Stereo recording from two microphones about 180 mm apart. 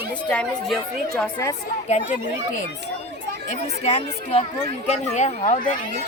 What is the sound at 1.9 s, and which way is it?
Speech, 45° left (ahead or behind).